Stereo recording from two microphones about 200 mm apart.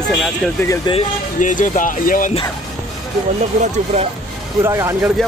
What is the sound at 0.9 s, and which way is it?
Speech, 25° left (ahead or behind).